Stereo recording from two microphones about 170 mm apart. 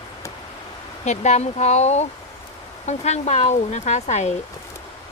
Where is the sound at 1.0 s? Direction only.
45° left (ahead or behind).